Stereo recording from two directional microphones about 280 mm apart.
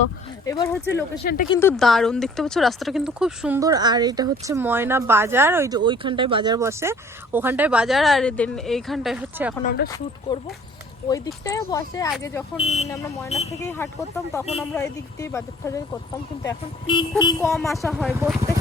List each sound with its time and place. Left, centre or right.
0.4 s speech: centre
1.2 s speech: left
1.5 s a woman's voice: centre
9.6 s speech: left
10.3 s speech: centre
11.4 s speech: centre
12.5 s speech: left
14.7 s speech: centre
17.7 s a woman's voice: centre